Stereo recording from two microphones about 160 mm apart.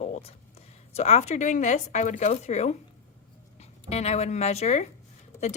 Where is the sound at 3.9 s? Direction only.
40° left (ahead or behind).